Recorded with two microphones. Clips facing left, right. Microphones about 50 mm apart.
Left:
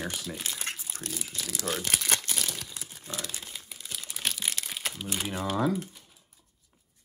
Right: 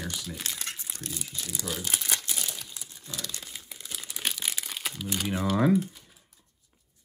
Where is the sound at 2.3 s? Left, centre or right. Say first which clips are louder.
Left 2 dB; left.